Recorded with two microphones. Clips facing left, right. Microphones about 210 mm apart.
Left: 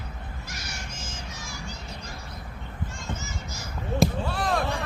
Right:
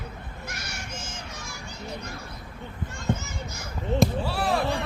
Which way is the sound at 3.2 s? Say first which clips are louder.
Right 1 dB; 60° right (ahead or behind).